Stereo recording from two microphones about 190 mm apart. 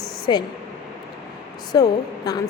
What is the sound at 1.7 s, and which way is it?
Speech, 20° left (ahead or behind).